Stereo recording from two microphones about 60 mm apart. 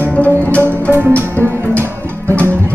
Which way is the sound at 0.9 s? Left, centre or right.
Right.